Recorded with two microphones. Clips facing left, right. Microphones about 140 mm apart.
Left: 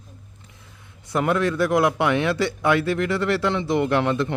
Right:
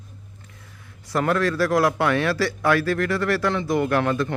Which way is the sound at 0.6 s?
20° left (ahead or behind).